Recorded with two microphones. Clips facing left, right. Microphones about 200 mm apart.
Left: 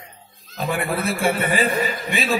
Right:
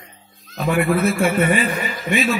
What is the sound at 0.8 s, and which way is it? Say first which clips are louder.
Speech: right 2 dB; 30° left (ahead or behind).